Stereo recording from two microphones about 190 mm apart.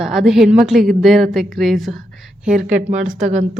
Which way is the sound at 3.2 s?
40° right (ahead or behind).